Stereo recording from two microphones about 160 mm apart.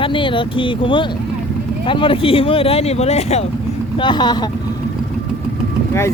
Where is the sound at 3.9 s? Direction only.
30° left (ahead or behind).